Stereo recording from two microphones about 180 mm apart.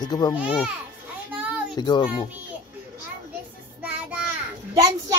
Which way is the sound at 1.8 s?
25° left (ahead or behind).